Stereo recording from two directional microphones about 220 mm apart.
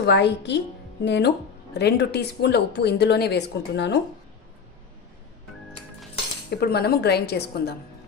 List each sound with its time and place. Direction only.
0.0 s a woman's voice: 50° left (ahead or behind)
6.5 s a woman's voice: 45° left (ahead or behind)